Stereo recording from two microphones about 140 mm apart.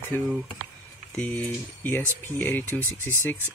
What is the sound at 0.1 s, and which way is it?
Speech, 15° left (ahead or behind).